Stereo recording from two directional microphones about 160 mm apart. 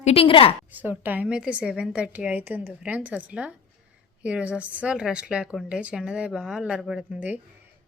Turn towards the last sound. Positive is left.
turn(degrees=-10)  # may be behind; listen again after turning